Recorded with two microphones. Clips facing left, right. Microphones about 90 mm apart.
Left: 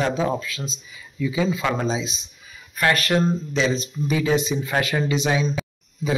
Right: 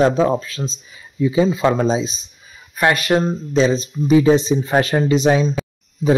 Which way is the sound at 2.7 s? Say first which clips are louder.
Right 4 dB; 20° right (ahead or behind).